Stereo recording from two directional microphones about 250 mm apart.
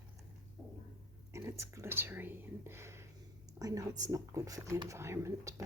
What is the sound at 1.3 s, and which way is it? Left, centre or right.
Speech, centre.